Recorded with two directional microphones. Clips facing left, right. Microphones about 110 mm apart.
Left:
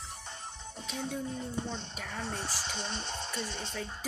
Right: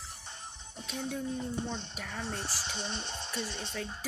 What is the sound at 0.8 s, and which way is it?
Speech, centre (ahead or behind).